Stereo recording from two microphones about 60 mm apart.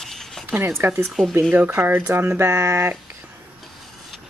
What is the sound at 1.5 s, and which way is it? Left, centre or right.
Speech, right.